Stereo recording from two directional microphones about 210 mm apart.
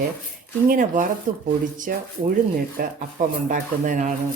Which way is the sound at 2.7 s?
40° right (ahead or behind).